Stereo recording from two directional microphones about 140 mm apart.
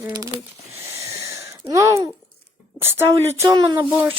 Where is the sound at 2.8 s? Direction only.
15° right (ahead or behind).